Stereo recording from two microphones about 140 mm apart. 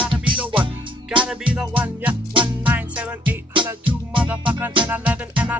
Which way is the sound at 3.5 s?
35° right (ahead or behind).